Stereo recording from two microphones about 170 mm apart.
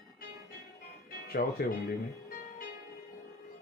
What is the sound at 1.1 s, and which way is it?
Music, 60° left (ahead or behind).